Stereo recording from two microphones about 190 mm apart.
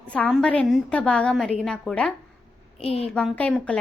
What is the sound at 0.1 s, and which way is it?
A woman's voice, 5° left (ahead or behind).